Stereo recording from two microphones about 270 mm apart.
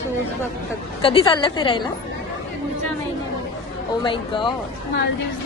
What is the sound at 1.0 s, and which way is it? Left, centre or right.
Speech, centre.